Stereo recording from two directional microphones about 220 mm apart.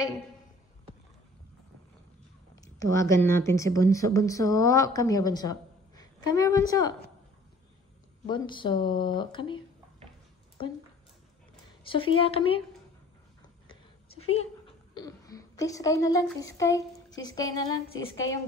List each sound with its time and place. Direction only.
2.5 s speech: 15° left (ahead or behind)
8.3 s speech: 20° left (ahead or behind)
11.9 s speech: 25° left (ahead or behind)
15.0 s a woman's voice: 15° left (ahead or behind)